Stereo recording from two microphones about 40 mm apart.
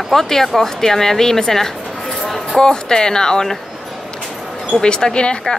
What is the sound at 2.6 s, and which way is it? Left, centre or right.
Speech, centre.